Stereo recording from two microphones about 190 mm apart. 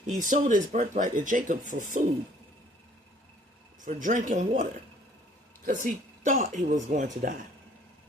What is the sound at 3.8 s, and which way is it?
Speech, 45° right (ahead or behind).